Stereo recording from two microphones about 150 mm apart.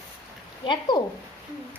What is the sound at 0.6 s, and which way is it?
Speech, 30° left (ahead or behind).